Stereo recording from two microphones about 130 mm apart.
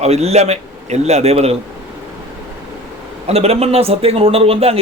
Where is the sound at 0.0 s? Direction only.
55° right (ahead or behind).